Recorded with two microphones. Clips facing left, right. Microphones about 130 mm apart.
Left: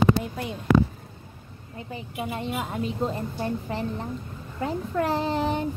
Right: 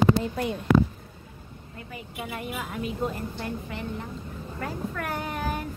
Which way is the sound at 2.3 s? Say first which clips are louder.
Left 3 dB; 25° left (ahead or behind).